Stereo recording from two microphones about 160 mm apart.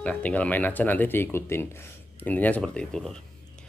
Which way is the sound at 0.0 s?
10° left (ahead or behind).